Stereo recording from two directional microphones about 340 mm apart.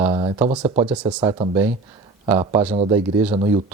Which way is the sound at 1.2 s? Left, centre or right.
Centre.